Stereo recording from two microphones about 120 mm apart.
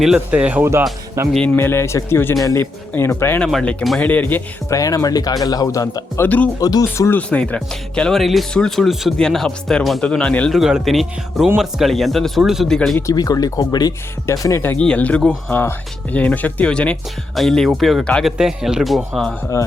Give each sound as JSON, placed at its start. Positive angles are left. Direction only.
{"t": 0.0, "sound": "speech", "side_deg": -10}
{"t": 1.5, "sound": "speech", "side_deg": 20}
{"t": 3.4, "sound": "speech", "side_deg": 10}
{"t": 4.7, "sound": "speech", "side_deg": 25}
{"t": 6.2, "sound": "speech", "side_deg": 15}
{"t": 6.6, "sound": "speech", "side_deg": 30}
{"t": 7.2, "sound": "speech", "side_deg": 10}
{"t": 10.5, "sound": "speech", "side_deg": -5}
{"t": 13.0, "sound": "speech", "side_deg": 30}